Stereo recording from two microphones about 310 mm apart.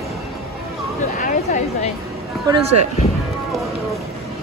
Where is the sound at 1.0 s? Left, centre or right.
Left.